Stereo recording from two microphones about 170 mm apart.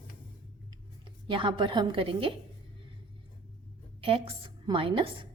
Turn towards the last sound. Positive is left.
turn(degrees=-30)  # may be behind; listen again after turning